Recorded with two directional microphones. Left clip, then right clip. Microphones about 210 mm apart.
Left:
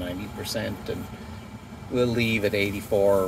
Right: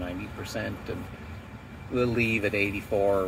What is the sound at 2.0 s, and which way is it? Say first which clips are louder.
Speech: left 2 dB; 15° left (ahead or behind).